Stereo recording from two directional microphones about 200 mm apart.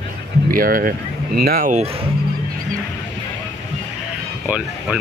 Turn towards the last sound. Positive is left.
turn(degrees=-5)  # may be behind; listen again after turning